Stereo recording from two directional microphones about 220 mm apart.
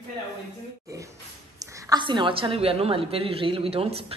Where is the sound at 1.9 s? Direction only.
20° right (ahead or behind).